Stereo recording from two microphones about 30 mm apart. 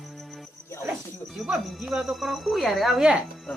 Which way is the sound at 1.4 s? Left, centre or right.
Centre.